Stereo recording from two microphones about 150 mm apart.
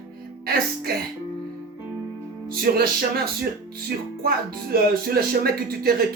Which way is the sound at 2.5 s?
90° right.